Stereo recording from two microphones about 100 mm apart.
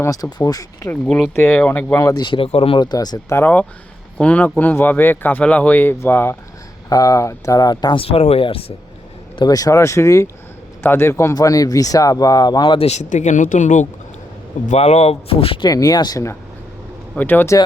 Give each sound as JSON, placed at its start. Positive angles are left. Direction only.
{"t": 0.0, "sound": "speech", "side_deg": 35}
{"t": 1.0, "sound": "speech", "side_deg": 0}
{"t": 1.4, "sound": "speech", "side_deg": 15}
{"t": 2.0, "sound": "speech", "side_deg": 35}
{"t": 2.2, "sound": "speech", "side_deg": 60}
{"t": 2.7, "sound": "speech", "side_deg": 45}
{"t": 3.3, "sound": "speech", "side_deg": 15}
{"t": 6.9, "sound": "speech", "side_deg": 35}
{"t": 7.9, "sound": "speech", "side_deg": 80}
{"t": 9.4, "sound": "speech", "side_deg": 35}
{"t": 12.7, "sound": "speech", "side_deg": 90}
{"t": 14.8, "sound": "speech", "side_deg": 90}
{"t": 15.6, "sound": "speech", "side_deg": 40}
{"t": 17.2, "sound": "speech", "side_deg": 20}